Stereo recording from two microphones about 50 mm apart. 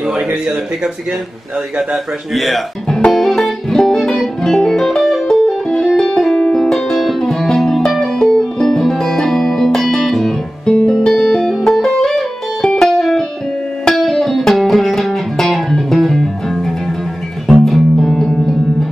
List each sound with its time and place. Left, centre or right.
0.0 s speech: right
2.3 s speech: centre
3.2 s music: centre
10.6 s music: centre
11.1 s music: centre